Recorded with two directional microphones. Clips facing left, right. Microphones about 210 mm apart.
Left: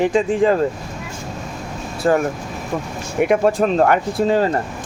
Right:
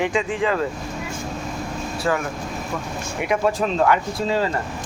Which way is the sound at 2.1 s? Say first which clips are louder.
Left 7 dB; 40° left (ahead or behind).